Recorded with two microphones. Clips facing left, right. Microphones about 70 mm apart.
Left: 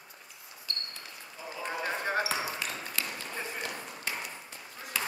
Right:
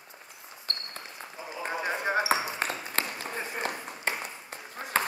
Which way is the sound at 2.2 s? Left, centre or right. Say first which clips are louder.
Right 5 dB; right.